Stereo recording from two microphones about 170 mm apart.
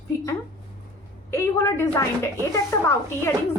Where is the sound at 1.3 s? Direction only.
15° left (ahead or behind).